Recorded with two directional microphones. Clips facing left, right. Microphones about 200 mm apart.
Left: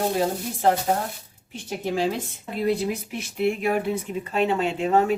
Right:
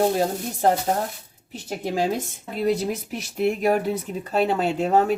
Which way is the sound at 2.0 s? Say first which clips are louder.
Right 3 dB; 45° right (ahead or behind).